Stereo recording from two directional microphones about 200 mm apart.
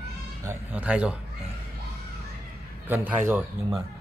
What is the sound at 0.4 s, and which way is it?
Speech, 10° right (ahead or behind).